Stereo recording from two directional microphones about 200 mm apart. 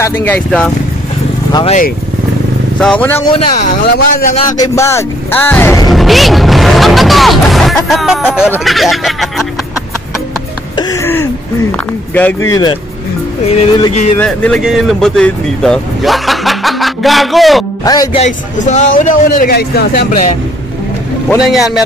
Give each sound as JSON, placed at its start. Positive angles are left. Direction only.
{"t": 0.0, "sound": "speech", "side_deg": 10}
{"t": 1.5, "sound": "music", "side_deg": 25}
{"t": 2.8, "sound": "speech", "side_deg": 5}
{"t": 3.2, "sound": "music", "side_deg": 30}
{"t": 3.8, "sound": "a man's voice", "side_deg": 45}
{"t": 4.6, "sound": "speech", "side_deg": 15}
{"t": 5.9, "sound": "speech", "side_deg": 0}
{"t": 10.8, "sound": "a sound", "side_deg": 15}
{"t": 12.1, "sound": "speech", "side_deg": 10}
{"t": 13.5, "sound": "music", "side_deg": 20}
{"t": 14.1, "sound": "speech", "side_deg": 5}
{"t": 17.8, "sound": "music", "side_deg": 20}
{"t": 18.2, "sound": "a man's voice", "side_deg": 35}
{"t": 21.4, "sound": "speech", "side_deg": 0}